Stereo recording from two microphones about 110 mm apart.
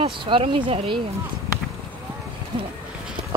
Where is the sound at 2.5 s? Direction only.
45° right (ahead or behind).